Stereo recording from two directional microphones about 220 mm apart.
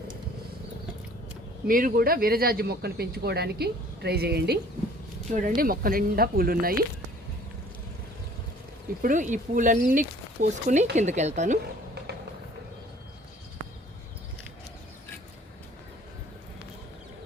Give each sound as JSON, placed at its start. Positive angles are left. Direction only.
{"t": 1.6, "sound": "speech", "side_deg": -40}
{"t": 9.0, "sound": "speech", "side_deg": -35}